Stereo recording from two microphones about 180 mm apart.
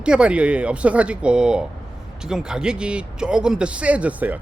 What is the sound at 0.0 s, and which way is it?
Speech, 5° right (ahead or behind).